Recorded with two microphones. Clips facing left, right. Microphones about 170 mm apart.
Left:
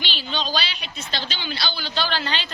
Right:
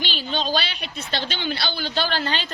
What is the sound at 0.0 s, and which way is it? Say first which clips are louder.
A woman's voice: right 2 dB; 45° right (ahead or behind).